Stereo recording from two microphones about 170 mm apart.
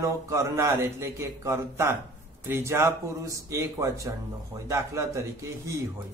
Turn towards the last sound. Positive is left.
turn(degrees=-20)  # may be behind; listen again after turning